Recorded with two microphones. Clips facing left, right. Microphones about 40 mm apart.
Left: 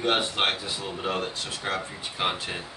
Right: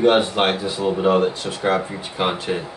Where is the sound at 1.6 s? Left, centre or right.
Right.